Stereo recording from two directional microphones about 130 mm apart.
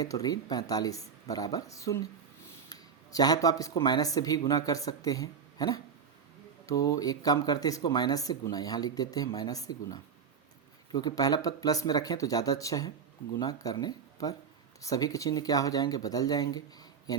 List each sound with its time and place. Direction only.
0.0 s speech: 30° left (ahead or behind)
2.6 s a sound: 30° left (ahead or behind)
3.8 s speech: 30° left (ahead or behind)